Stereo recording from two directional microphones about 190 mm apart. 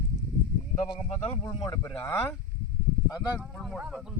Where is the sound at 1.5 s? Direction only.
20° left (ahead or behind).